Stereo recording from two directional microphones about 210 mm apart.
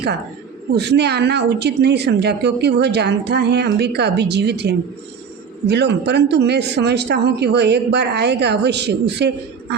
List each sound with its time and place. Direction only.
0.7 s a woman's voice: 55° right (ahead or behind)